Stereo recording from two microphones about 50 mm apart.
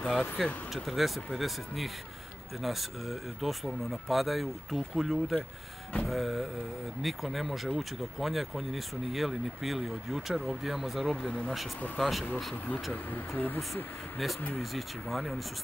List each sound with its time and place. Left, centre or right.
0.0 s speech: centre
0.8 s speech: centre
11.2 s speech: centre
12.0 s speech: centre
14.2 s speech: centre